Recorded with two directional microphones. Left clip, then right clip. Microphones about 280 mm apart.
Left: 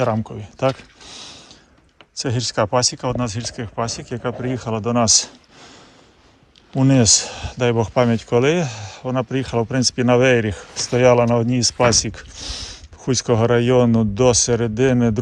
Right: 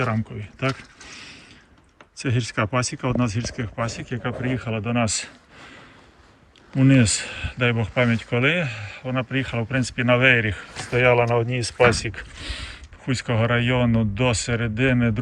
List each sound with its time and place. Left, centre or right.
0.0 s speech: centre
6.7 s speech: centre